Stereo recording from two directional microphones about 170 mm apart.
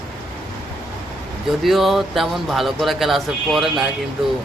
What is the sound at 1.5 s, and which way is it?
Speech, centre (ahead or behind).